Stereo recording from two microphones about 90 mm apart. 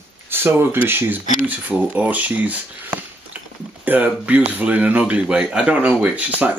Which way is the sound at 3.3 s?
15° right (ahead or behind).